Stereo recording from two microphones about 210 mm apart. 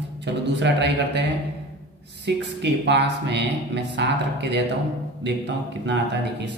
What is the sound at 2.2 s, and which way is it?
Speech, 55° right (ahead or behind).